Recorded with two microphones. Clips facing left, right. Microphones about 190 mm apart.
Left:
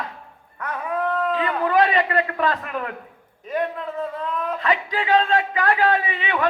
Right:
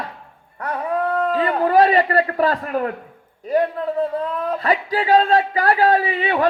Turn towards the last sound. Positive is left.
turn(degrees=-35)  # may be behind; listen again after turning